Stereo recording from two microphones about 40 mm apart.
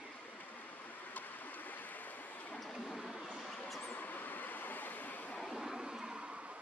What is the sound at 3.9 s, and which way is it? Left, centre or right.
Vehicle, left.